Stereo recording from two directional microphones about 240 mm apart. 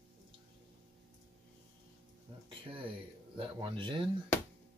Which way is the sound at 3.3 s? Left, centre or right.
Right.